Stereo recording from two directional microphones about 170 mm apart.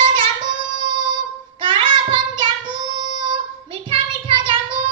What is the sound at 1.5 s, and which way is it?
Child singing, 30° right (ahead or behind).